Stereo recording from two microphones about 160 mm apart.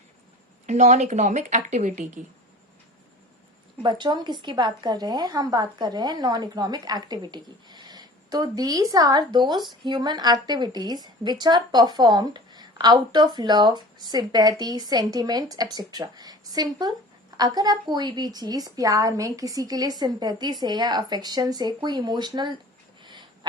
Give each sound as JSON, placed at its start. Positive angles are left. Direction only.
{"t": 0.7, "sound": "speech", "side_deg": -45}
{"t": 3.8, "sound": "a woman's voice", "side_deg": -30}
{"t": 23.0, "sound": "a sound", "side_deg": -30}